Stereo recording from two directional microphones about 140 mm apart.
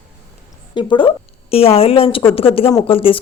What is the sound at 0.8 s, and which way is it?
A woman's voice, 35° left (ahead or behind).